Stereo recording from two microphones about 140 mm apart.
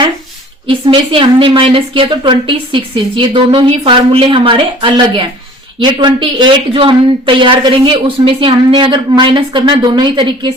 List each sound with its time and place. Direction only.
0.7 s speech: 40° right (ahead or behind)